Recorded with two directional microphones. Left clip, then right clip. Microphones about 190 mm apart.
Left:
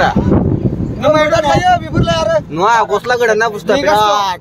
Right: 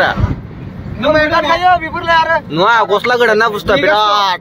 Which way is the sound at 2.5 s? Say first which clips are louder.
Right 2 dB; centre (ahead or behind).